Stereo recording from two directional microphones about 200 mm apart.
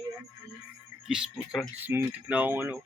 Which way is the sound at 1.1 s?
Centre (ahead or behind).